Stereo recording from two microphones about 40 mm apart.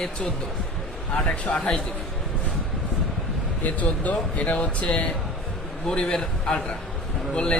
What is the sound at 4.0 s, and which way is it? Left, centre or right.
Speech, left.